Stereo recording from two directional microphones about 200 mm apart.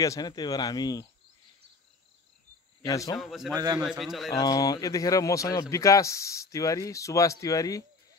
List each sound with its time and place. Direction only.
0.0 s speech: 20° left (ahead or behind)
2.9 s a man's voice: 15° left (ahead or behind)
3.2 s a man's voice: centre (ahead or behind)
3.5 s a man's voice: 20° right (ahead or behind)
3.8 s a man's voice: centre (ahead or behind)
4.4 s a man's voice: 20° left (ahead or behind)